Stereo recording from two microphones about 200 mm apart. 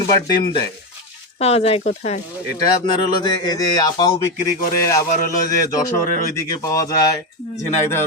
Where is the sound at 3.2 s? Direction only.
20° left (ahead or behind).